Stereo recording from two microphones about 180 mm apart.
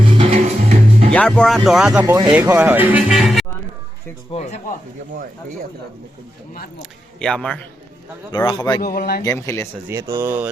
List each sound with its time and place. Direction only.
0.0 s music: 30° right (ahead or behind)
1.1 s speech: 5° left (ahead or behind)
2.0 s speech: 20° right (ahead or behind); by 3.4 s centre (ahead or behind)
4.3 s speech: 35° left (ahead or behind)
7.2 s speech: 5° left (ahead or behind)
8.4 s a man's voice: 25° left (ahead or behind)
8.8 s a man's voice: 50° left (ahead or behind)
9.2 s speech: 15° left (ahead or behind)
9.8 s speech: 15° right (ahead or behind)